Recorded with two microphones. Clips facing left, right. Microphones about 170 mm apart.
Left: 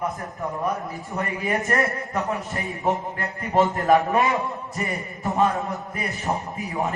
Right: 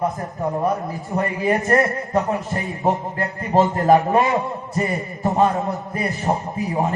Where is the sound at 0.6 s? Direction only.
30° right (ahead or behind).